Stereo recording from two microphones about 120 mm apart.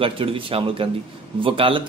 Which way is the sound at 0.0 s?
50° right (ahead or behind).